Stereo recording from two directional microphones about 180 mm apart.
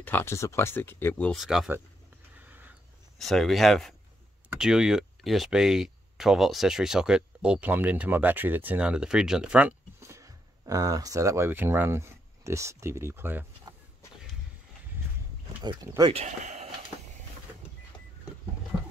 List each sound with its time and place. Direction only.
0.0 s speech: 10° left (ahead or behind)
2.4 s a sound: 10° right (ahead or behind)
3.2 s speech: centre (ahead or behind)
15.6 s speech: 20° right (ahead or behind)
16.1 s speech: 40° right (ahead or behind)